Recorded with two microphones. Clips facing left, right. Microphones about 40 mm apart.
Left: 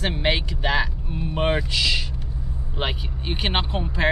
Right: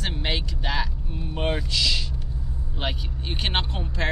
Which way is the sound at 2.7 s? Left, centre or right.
Centre.